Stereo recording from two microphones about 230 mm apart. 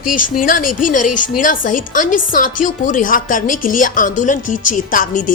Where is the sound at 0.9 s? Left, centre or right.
Left.